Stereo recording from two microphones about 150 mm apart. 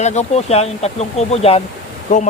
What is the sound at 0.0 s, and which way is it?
Speech, 50° left (ahead or behind).